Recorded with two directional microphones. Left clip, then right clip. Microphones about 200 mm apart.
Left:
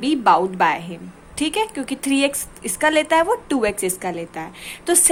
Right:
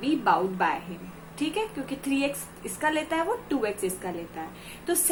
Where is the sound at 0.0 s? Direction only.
50° left (ahead or behind).